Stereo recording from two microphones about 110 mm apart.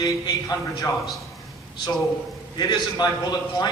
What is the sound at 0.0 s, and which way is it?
Speech, 35° left (ahead or behind).